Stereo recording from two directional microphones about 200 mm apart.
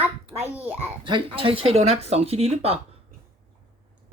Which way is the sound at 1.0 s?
25° right (ahead or behind).